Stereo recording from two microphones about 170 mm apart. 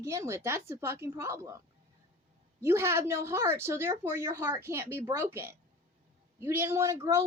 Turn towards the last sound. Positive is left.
turn(degrees=-15)  # may be behind; listen again after turning